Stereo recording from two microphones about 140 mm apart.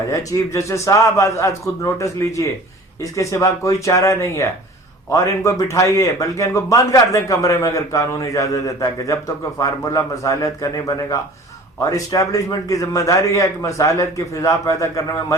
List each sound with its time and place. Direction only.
0.1 s a man's voice: 25° left (ahead or behind)